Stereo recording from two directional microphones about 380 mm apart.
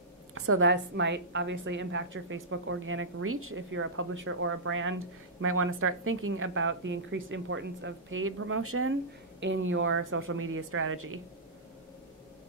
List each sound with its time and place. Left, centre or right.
0.3 s a woman's voice: right